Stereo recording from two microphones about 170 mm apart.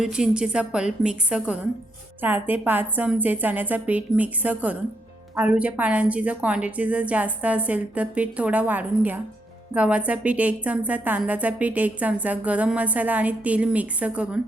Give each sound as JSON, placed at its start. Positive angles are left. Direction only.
{"t": 0.0, "sound": "a woman's voice", "side_deg": -5}